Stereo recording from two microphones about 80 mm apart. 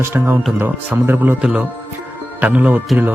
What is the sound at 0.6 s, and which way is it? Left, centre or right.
Speech, right.